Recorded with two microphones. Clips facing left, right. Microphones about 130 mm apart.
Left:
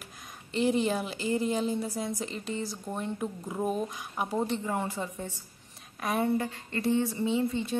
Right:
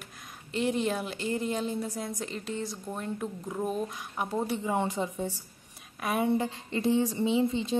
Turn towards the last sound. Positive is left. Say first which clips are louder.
# right 2 dB
turn(degrees=-20)  # may be behind; listen again after turning